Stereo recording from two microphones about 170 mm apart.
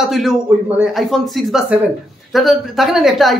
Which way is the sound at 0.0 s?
Centre (ahead or behind).